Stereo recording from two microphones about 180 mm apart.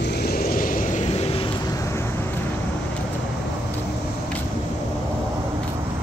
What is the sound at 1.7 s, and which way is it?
Vehicle, 15° left (ahead or behind).